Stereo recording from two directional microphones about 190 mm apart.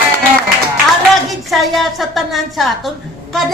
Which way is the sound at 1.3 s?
Centre (ahead or behind).